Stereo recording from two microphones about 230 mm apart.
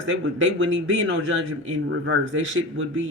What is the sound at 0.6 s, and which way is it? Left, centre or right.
Speech, right.